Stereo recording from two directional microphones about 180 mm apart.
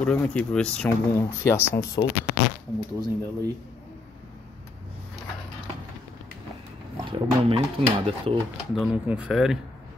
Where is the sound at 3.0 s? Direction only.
20° right (ahead or behind).